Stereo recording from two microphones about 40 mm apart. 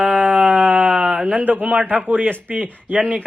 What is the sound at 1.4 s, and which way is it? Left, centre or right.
A man's voice, right.